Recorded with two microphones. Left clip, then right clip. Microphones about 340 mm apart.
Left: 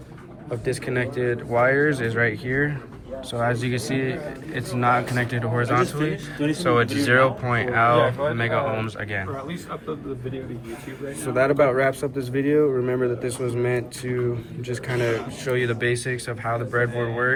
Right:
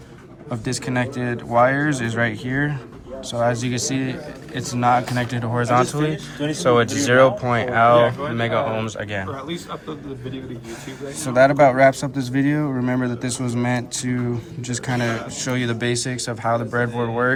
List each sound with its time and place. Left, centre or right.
0.6 s speech: centre
11.0 s speech: centre
15.4 s speech: centre